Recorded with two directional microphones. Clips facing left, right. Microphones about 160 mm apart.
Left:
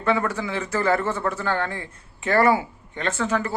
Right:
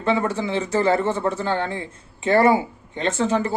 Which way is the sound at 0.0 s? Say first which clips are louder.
Right 2 dB; 25° right (ahead or behind).